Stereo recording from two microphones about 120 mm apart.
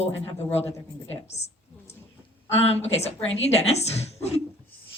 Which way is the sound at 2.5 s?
60° left (ahead or behind).